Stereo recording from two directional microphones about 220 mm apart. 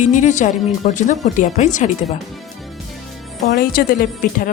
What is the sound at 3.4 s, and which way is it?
Speech, 40° left (ahead or behind).